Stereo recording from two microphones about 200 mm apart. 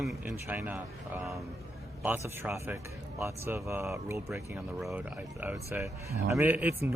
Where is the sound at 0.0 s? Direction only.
Centre (ahead or behind).